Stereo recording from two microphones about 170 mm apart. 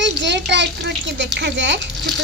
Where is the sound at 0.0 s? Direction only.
90° right.